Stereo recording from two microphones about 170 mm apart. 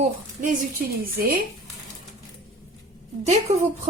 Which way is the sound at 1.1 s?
60° right (ahead or behind).